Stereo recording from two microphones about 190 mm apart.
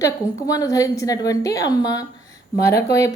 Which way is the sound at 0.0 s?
20° left (ahead or behind).